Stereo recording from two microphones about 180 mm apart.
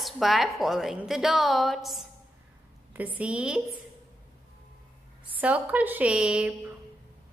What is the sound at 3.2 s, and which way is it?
Speech, 5° right (ahead or behind).